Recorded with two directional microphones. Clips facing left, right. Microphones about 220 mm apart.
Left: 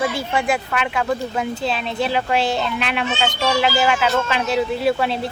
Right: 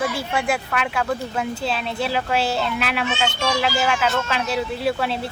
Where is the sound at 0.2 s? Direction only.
5° right (ahead or behind).